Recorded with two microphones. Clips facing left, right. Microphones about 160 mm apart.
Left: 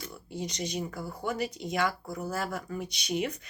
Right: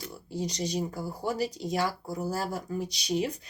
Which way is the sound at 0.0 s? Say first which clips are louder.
Right 3 dB; 35° right (ahead or behind).